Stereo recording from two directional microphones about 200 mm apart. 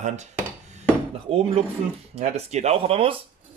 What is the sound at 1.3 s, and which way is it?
Speech, 25° right (ahead or behind).